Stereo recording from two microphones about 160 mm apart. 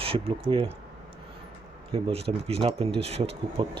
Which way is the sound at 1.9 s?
35° right (ahead or behind).